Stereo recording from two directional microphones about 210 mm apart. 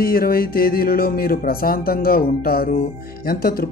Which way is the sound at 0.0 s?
45° left (ahead or behind).